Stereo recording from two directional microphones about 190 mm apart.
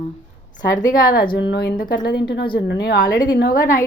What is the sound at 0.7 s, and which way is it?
Speech, 45° left (ahead or behind).